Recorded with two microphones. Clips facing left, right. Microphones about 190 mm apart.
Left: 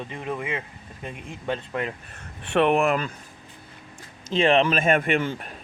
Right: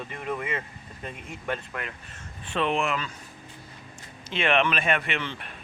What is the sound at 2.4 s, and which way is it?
Speech, 65° left (ahead or behind).